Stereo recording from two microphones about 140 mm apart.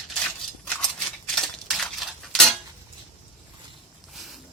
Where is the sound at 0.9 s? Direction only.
5° left (ahead or behind).